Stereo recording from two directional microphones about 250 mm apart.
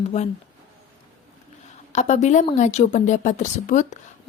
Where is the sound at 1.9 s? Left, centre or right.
Left.